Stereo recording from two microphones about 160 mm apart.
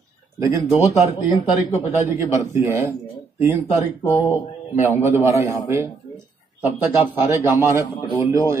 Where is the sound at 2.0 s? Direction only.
15° right (ahead or behind).